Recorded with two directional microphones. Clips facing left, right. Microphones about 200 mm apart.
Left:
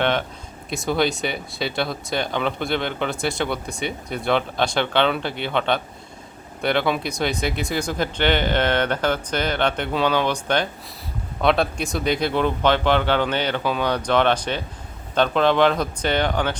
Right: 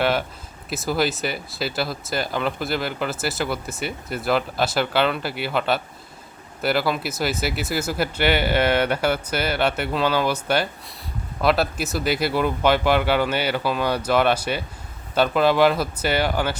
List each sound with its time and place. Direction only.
0.0 s speech: 5° right (ahead or behind)